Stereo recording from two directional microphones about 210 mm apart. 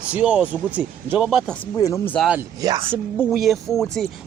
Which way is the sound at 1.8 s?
15° left (ahead or behind).